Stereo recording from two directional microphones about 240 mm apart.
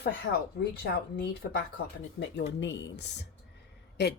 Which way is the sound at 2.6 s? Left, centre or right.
Left.